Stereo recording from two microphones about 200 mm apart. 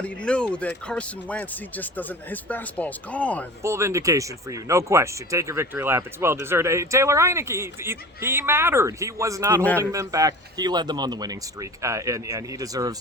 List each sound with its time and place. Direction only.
0.0 s speech: 5° left (ahead or behind)
3.6 s speech: 15° right (ahead or behind)